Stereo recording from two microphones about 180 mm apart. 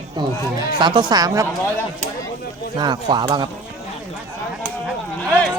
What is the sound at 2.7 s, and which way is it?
Speech, 25° right (ahead or behind).